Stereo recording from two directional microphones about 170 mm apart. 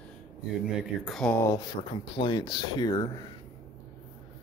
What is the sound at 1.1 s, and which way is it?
Speech, 10° left (ahead or behind).